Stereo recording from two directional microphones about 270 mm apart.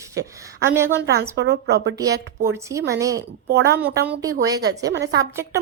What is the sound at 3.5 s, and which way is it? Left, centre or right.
Speech, right.